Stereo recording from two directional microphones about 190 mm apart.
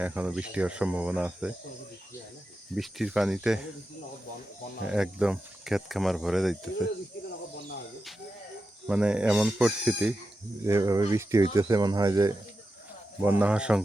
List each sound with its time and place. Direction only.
0.0 s speech: 10° right (ahead or behind)
2.7 s speech: centre (ahead or behind)
4.8 s speech: 5° right (ahead or behind)
7.3 s snake: 60° left (ahead or behind)
8.9 s speech: 5° right (ahead or behind)
10.7 s speech: 15° right (ahead or behind)
13.4 s speech: 5° right (ahead or behind)